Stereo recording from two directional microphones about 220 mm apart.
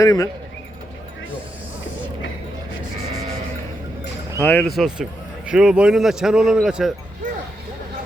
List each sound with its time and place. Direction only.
0.0 s speech: 15° left (ahead or behind)
4.4 s speech: 5° left (ahead or behind)